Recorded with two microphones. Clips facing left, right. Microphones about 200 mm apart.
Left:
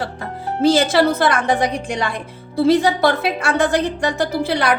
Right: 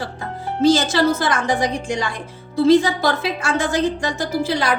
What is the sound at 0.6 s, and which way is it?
A woman's voice, 60° left (ahead or behind).